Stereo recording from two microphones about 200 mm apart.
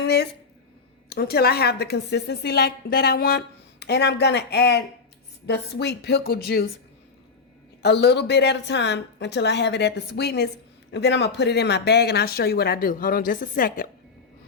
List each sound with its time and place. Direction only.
0.0 s a sound: 55° left (ahead or behind)
1.1 s a woman's voice: 50° left (ahead or behind)
7.8 s a woman's voice: 55° left (ahead or behind)